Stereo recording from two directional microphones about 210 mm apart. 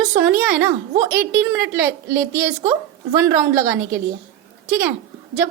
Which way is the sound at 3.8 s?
50° right (ahead or behind).